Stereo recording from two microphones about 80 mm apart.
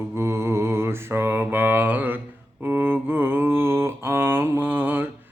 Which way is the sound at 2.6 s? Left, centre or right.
Right.